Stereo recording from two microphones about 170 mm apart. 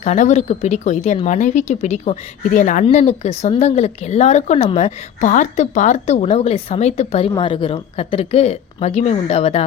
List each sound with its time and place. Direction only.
0.0 s speech: 45° left (ahead or behind)